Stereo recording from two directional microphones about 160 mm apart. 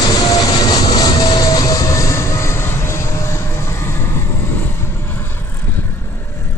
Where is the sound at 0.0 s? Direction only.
25° left (ahead or behind).